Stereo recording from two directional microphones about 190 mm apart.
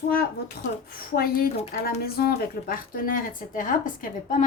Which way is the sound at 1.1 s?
50° left (ahead or behind).